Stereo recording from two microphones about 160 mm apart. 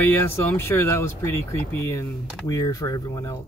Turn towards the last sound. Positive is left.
turn(degrees=20)  # may be behind; listen again after turning